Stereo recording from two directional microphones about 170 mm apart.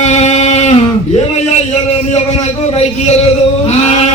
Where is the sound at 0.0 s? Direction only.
40° left (ahead or behind).